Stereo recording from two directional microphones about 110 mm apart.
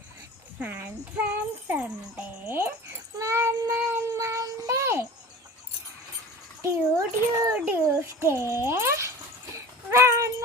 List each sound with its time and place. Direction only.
0.6 s a child's voice: 15° right (ahead or behind)
3.2 s child singing: 25° right (ahead or behind)
6.6 s speech: 30° right (ahead or behind)
7.5 s a child's voice: 15° right (ahead or behind)
8.0 s a child's voice: 25° right (ahead or behind)